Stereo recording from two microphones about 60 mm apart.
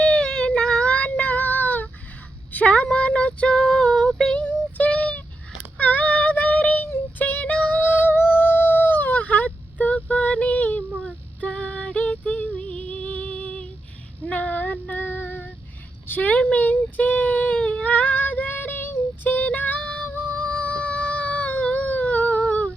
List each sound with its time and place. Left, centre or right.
0.0 s child singing: centre
2.5 s a sound: left
4.4 s synthetic singing: left
5.7 s child singing: left
7.2 s music: left
7.8 s a sound: left
14.3 s female singing: left
16.0 s baby cry: left